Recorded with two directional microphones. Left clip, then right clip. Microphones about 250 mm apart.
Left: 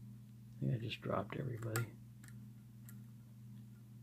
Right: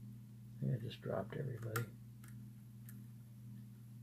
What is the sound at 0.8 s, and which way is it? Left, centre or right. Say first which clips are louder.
Speech: left 3 dB; left.